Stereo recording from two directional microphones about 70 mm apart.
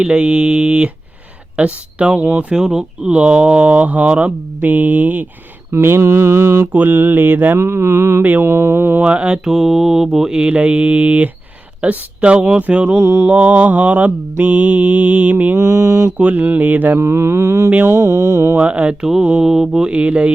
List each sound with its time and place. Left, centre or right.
0.0 s mantra: centre
1.5 s speech: centre
5.7 s mantra: right
9.0 s mantra: centre
13.2 s speech: centre
15.5 s mantra: right
16.1 s speech: right
17.8 s mantra: right
18.5 s mantra: centre